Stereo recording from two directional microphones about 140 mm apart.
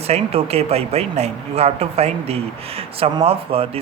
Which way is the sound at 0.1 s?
45° right (ahead or behind).